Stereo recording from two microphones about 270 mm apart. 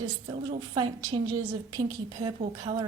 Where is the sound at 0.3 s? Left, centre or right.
Centre.